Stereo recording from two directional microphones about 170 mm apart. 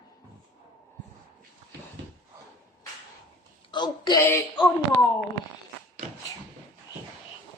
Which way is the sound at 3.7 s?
25° left (ahead or behind).